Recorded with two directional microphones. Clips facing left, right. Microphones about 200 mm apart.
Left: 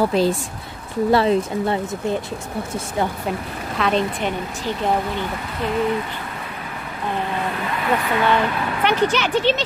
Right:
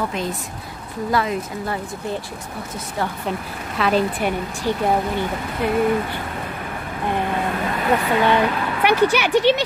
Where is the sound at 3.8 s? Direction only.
5° right (ahead or behind).